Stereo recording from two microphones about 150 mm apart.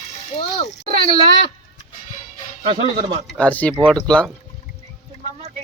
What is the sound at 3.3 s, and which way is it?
Speech, 10° left (ahead or behind).